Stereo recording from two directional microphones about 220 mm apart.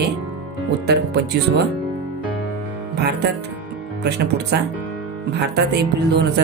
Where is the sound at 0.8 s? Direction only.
50° right (ahead or behind).